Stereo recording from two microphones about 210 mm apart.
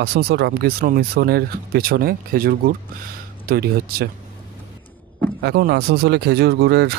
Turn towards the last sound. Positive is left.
turn(degrees=-55)  # may be behind; listen again after turning